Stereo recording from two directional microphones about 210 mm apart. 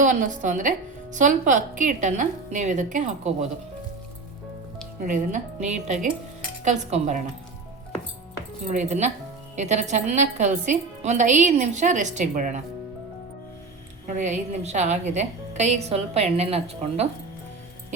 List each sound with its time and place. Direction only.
0.0 s a woman's voice: 35° right (ahead or behind)
5.0 s a woman's voice: 35° right (ahead or behind)
8.6 s a woman's voice: 35° right (ahead or behind)
14.2 s a woman's voice: 35° right (ahead or behind)